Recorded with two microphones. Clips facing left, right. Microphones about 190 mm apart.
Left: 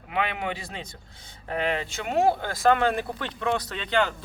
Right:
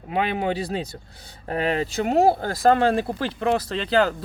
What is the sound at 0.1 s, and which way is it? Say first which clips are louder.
Speech: right 5 dB; 35° right (ahead or behind).